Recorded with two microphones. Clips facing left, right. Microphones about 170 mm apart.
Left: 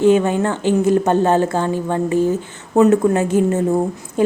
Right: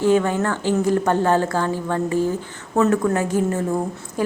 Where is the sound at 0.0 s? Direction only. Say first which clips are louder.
Left 4 dB; 20° left (ahead or behind).